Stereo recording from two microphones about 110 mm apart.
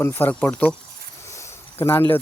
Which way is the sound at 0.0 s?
20° left (ahead or behind).